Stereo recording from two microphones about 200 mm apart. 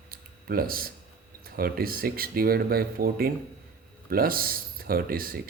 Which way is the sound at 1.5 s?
50° right (ahead or behind).